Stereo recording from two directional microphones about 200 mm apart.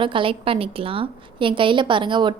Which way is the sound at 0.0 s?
25° right (ahead or behind).